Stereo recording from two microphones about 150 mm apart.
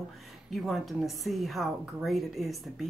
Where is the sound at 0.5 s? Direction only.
Centre (ahead or behind).